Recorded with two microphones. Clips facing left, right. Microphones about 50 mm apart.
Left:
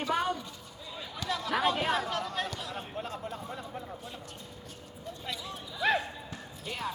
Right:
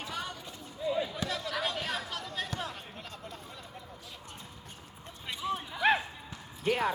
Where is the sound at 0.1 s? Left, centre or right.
Left.